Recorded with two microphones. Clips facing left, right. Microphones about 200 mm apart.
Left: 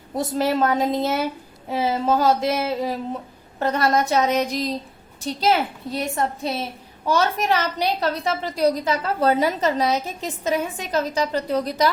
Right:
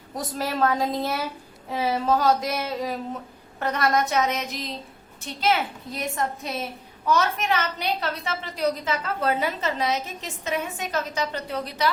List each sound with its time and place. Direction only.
0.2 s a woman's voice: 25° left (ahead or behind); by 11.9 s 40° left (ahead or behind)